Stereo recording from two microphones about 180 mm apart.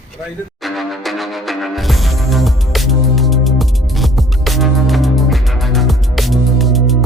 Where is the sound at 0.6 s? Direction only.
Centre (ahead or behind).